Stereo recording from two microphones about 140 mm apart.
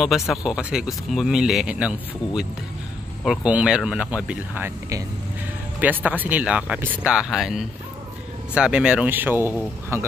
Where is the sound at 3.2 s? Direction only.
5° right (ahead or behind).